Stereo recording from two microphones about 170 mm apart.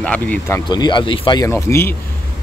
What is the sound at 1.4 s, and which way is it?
Speech, 15° left (ahead or behind).